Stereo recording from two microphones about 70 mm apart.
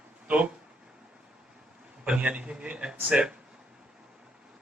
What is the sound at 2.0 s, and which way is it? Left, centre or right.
Speech, centre.